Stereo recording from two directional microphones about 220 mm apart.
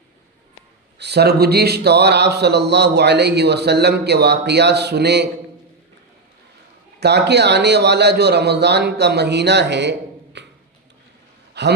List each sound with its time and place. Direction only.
0.9 s speech: 50° right (ahead or behind)
7.0 s speech: 50° right (ahead or behind)
11.6 s a sound: 50° right (ahead or behind)